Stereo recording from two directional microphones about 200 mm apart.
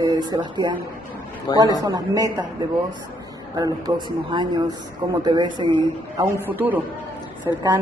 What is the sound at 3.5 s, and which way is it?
A woman's voice, 20° right (ahead or behind).